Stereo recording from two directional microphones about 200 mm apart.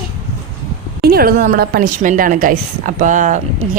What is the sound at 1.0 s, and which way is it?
A woman's voice, 50° right (ahead or behind).